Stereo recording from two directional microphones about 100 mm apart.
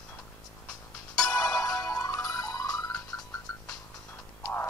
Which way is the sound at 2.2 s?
35° left (ahead or behind).